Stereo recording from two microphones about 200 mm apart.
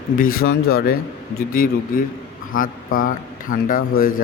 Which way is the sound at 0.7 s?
50° left (ahead or behind).